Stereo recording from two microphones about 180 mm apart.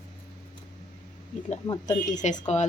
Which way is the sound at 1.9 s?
40° left (ahead or behind).